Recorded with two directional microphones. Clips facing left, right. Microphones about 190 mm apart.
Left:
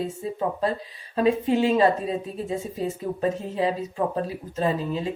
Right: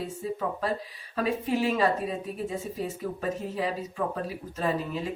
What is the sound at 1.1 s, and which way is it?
Speech, 25° left (ahead or behind).